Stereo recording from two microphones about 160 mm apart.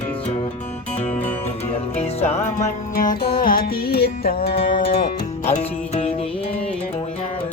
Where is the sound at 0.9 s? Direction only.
50° left (ahead or behind).